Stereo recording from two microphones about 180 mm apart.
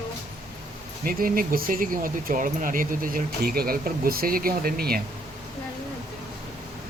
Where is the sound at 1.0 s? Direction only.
50° right (ahead or behind).